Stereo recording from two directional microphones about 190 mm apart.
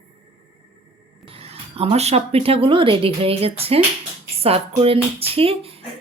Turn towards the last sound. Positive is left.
turn(degrees=-30)  # may be behind; listen again after turning